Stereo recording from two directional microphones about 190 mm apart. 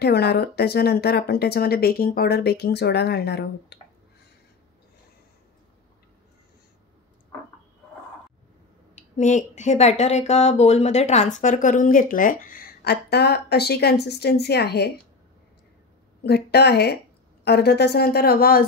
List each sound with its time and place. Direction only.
0.0 s speech: 60° left (ahead or behind)
8.9 s speech: 40° left (ahead or behind); by 14.9 s 60° left (ahead or behind)
16.3 s speech: 60° left (ahead or behind)